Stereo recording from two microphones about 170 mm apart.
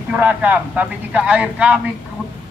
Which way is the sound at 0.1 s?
10° right (ahead or behind).